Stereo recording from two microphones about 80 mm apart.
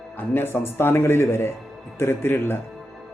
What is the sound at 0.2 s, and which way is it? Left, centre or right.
Speech, left.